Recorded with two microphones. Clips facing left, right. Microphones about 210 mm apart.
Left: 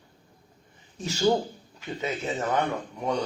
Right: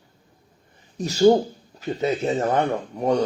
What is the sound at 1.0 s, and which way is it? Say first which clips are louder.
Speech: right 8 dB; 40° right (ahead or behind).